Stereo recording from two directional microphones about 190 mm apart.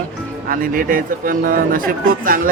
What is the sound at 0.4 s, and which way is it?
Speech, 50° right (ahead or behind).